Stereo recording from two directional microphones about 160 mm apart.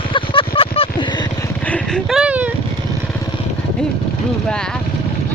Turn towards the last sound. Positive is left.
turn(degrees=5)  # may be behind; listen again after turning